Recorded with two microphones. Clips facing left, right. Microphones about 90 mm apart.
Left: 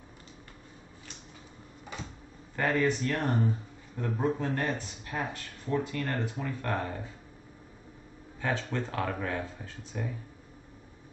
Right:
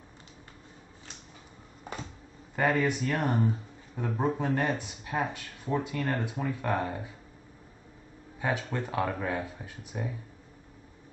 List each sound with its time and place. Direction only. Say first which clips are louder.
2.5 s speech: right 1 dB; 15° right (ahead or behind)
8.4 s speech: right 1 dB; 15° right (ahead or behind)